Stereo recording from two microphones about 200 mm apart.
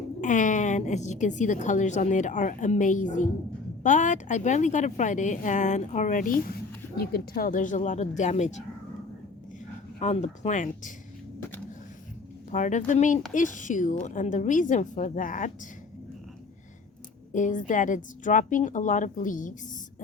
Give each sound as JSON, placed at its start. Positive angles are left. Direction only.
{"t": 0.2, "sound": "speech", "side_deg": 40}
{"t": 10.0, "sound": "speech", "side_deg": 35}
{"t": 12.5, "sound": "speech", "side_deg": 40}
{"t": 17.3, "sound": "speech", "side_deg": 40}